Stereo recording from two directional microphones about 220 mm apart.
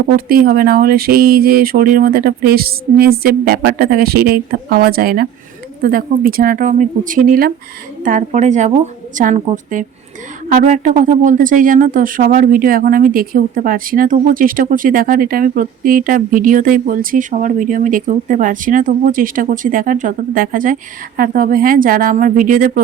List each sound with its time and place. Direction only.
0.3 s speech: 40° right (ahead or behind)